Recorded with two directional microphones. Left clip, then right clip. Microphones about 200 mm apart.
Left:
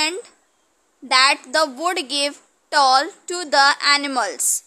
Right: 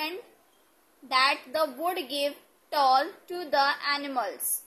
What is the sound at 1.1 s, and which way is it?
A woman's voice, 35° left (ahead or behind).